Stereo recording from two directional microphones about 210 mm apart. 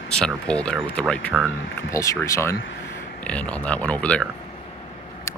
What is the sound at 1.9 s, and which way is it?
Speech, 15° left (ahead or behind).